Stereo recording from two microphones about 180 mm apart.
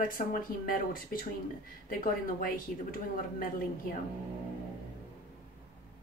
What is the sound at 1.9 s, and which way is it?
Speech, 50° left (ahead or behind).